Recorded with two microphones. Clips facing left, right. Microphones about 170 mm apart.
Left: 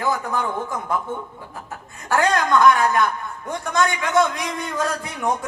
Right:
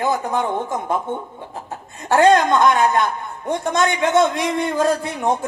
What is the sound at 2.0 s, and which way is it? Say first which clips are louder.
A man's voice: right 6 dB; 25° right (ahead or behind).